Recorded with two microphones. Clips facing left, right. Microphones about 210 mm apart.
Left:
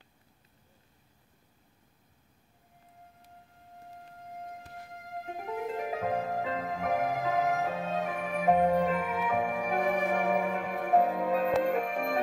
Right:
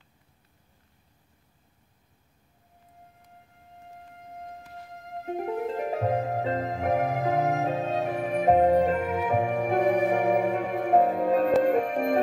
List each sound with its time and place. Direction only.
5.4 s music: 40° right (ahead or behind)